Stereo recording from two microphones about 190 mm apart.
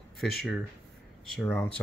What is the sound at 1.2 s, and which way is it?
Speech, 10° left (ahead or behind).